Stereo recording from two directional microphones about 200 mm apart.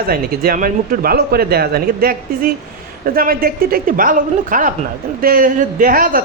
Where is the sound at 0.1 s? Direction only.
45° right (ahead or behind).